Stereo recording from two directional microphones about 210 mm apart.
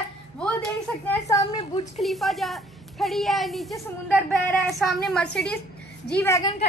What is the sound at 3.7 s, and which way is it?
Speech, 10° left (ahead or behind).